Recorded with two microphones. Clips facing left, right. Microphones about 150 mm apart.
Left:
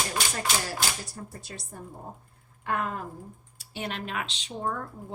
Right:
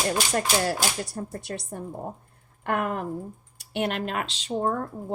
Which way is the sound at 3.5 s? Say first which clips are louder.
Right 8 dB; 60° right (ahead or behind).